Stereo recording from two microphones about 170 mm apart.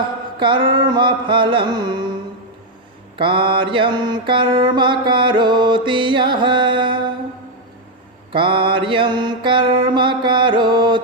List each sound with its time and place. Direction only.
0.3 s mantra: 30° right (ahead or behind)
3.2 s mantra: 30° right (ahead or behind)
8.3 s mantra: 30° right (ahead or behind)